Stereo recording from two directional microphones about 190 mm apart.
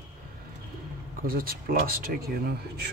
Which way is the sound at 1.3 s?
50° right (ahead or behind).